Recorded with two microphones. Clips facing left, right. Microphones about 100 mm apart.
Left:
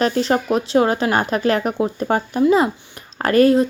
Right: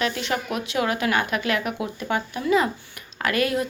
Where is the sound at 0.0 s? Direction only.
35° left (ahead or behind).